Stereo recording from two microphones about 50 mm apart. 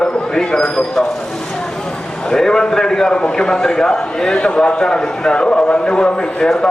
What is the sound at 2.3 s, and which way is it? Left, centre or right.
A man's voice, centre.